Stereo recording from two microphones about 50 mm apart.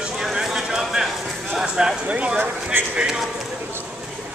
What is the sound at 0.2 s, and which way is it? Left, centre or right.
Clip-clop, centre.